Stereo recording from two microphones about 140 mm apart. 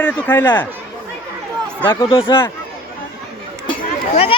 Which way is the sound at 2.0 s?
35° left (ahead or behind).